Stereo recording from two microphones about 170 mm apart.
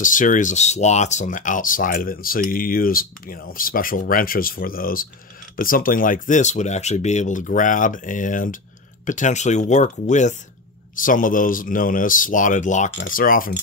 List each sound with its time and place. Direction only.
0.0 s speech: 50° left (ahead or behind)